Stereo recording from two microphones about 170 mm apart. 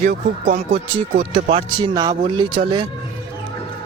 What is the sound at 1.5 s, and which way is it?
Speech, 25° right (ahead or behind).